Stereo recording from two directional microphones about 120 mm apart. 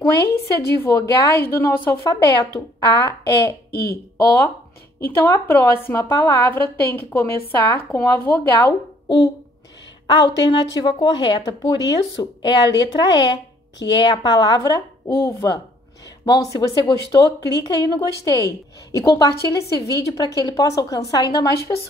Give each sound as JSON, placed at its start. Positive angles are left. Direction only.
{"t": 0.3, "sound": "a woman's voice", "side_deg": 25}
{"t": 5.2, "sound": "a woman's voice", "side_deg": 20}
{"t": 10.0, "sound": "a woman's voice", "side_deg": 35}